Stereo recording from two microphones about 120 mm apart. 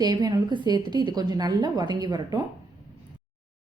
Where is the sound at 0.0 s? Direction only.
35° right (ahead or behind).